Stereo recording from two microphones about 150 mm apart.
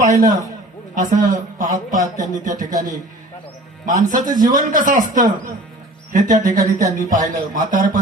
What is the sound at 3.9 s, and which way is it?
Speech, 60° right (ahead or behind).